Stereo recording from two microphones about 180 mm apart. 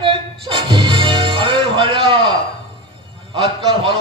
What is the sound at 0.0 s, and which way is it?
Music, 25° right (ahead or behind).